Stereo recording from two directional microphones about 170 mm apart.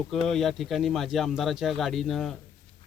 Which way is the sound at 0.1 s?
Centre (ahead or behind).